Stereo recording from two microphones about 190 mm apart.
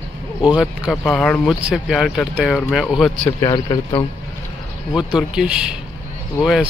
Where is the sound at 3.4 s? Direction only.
20° left (ahead or behind).